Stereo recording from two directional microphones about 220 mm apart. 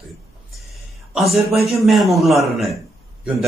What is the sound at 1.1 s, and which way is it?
A man's voice, centre (ahead or behind).